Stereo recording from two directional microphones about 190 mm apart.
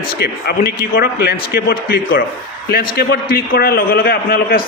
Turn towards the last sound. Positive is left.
turn(degrees=50)  # may be behind; listen again after turning